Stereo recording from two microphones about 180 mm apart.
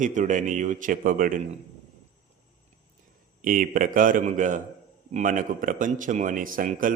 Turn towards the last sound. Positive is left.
turn(degrees=-50)  # may be behind; listen again after turning